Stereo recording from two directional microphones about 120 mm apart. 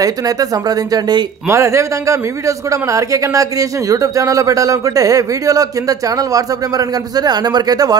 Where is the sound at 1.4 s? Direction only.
25° right (ahead or behind).